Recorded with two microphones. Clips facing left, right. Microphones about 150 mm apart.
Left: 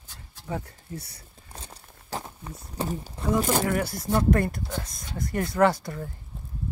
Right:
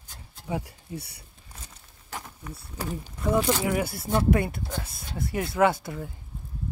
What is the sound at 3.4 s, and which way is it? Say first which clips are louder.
Speech: even; 45° left (ahead or behind).